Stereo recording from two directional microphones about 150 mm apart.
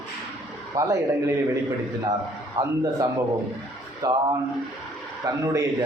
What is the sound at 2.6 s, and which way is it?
Speech, 25° right (ahead or behind).